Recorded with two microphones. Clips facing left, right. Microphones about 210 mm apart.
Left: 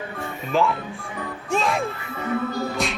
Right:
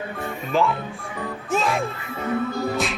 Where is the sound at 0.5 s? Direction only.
Centre (ahead or behind).